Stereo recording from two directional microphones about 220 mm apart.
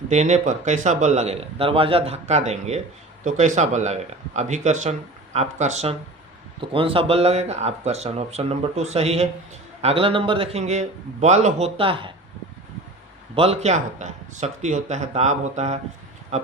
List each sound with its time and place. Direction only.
0.1 s a man's voice: 30° right (ahead or behind)
13.3 s a man's voice: 25° right (ahead or behind)